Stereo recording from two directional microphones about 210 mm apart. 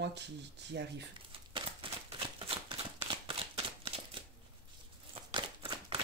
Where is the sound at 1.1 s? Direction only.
25° right (ahead or behind).